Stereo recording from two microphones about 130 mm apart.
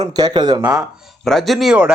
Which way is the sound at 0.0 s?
30° right (ahead or behind).